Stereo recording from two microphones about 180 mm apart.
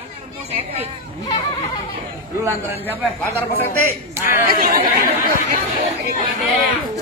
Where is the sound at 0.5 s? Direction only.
35° right (ahead or behind).